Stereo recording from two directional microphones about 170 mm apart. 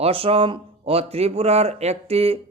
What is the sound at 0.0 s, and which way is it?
A man's voice, 35° right (ahead or behind).